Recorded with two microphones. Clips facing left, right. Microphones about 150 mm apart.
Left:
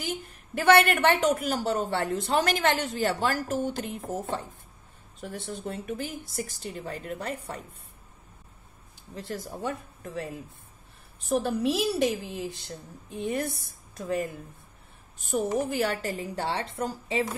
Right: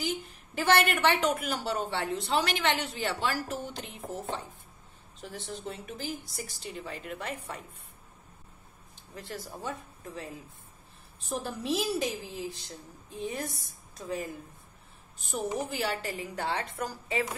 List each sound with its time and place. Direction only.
0.0 s a woman's voice: 55° left (ahead or behind)
5.2 s a woman's voice: 50° left (ahead or behind)
9.1 s a woman's voice: 35° left (ahead or behind)
9.4 s a woman's voice: 60° left (ahead or behind)
11.2 s a woman's voice: 65° left (ahead or behind)
15.7 s a woman's voice: 50° left (ahead or behind); by 17.3 s 25° left (ahead or behind)